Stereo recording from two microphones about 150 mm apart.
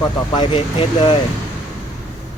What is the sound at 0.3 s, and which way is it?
Speech, 35° left (ahead or behind).